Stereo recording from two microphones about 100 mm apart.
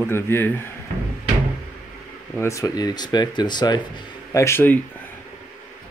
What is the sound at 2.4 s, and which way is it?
Speech, 30° left (ahead or behind).